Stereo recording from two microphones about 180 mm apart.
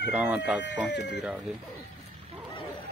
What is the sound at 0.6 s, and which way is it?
Speech, 75° left (ahead or behind).